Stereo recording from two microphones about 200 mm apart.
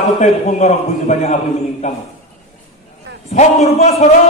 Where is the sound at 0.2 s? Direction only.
35° left (ahead or behind).